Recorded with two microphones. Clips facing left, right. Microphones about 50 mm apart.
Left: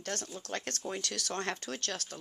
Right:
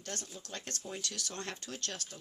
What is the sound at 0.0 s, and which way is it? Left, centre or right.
Speech, left.